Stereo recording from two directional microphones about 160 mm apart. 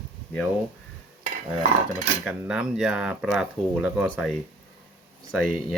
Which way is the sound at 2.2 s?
5° right (ahead or behind).